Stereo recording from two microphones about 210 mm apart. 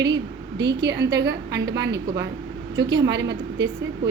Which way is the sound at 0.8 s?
50° right (ahead or behind).